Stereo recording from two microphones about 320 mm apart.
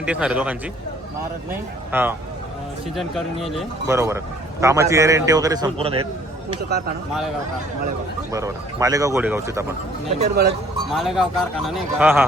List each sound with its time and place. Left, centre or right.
0.1 s speech: centre
1.9 s a man's voice: centre
8.3 s a man's voice: centre
10.2 s speech: right
10.9 s speech: centre